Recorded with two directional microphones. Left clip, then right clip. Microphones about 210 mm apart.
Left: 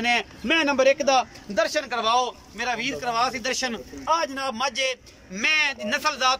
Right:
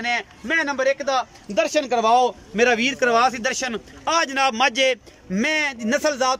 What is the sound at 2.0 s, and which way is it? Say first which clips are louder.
Speech: right 5 dB; 35° right (ahead or behind).